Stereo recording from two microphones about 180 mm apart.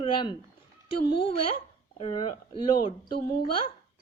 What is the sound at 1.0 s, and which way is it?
Speech, 65° left (ahead or behind).